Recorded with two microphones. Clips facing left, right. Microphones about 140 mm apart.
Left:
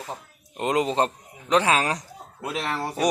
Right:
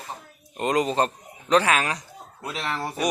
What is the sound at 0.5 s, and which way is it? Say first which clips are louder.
A man's voice: even; 20° left (ahead or behind).